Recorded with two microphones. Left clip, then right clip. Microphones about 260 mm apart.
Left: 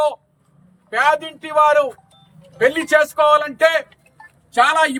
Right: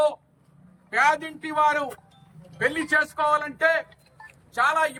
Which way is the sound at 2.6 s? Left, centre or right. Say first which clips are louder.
Left 8 dB; left.